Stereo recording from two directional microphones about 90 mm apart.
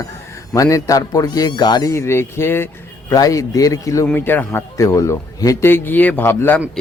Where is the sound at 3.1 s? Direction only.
40° left (ahead or behind).